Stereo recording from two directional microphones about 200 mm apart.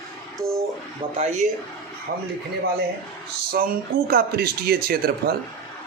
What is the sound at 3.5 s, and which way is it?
Speech, 45° right (ahead or behind).